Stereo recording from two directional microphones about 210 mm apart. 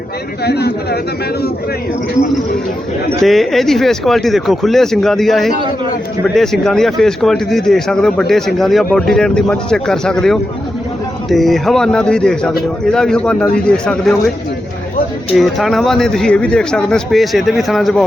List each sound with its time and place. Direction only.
0.4 s speech: 50° left (ahead or behind)
3.2 s speech: centre (ahead or behind)
15.4 s speech: centre (ahead or behind)